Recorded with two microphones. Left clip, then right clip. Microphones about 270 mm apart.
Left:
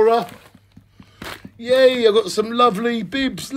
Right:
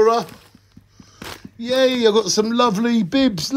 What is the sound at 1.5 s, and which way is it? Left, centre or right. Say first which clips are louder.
Speech: left 3 dB; right.